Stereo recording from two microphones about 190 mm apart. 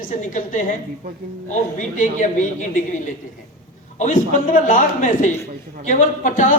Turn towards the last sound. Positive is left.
turn(degrees=45)  # may be behind; listen again after turning